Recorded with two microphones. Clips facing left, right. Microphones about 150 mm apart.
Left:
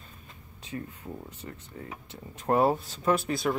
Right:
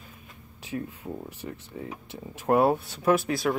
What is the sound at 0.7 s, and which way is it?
Speech, 15° right (ahead or behind).